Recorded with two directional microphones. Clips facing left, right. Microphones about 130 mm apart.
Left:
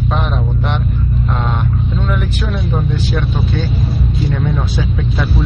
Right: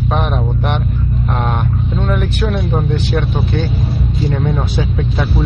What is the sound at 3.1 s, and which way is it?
Speech, 50° right (ahead or behind).